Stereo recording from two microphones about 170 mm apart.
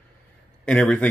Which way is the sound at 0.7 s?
10° left (ahead or behind).